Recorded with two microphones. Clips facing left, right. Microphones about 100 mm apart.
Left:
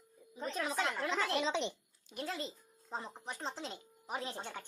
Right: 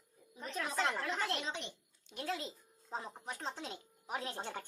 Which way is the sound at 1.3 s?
90° left.